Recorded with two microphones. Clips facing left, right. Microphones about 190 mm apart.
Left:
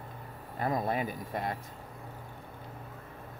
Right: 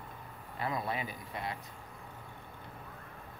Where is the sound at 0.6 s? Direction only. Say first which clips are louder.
Left 5 dB; 45° left (ahead or behind).